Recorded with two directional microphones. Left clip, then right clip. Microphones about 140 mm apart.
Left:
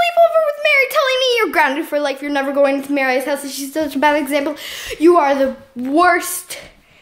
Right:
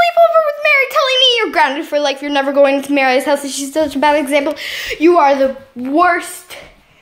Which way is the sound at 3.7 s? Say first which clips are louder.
Right 3 dB; 5° left (ahead or behind).